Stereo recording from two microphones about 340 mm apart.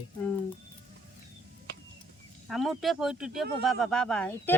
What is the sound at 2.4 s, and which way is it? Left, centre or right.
Speech, centre.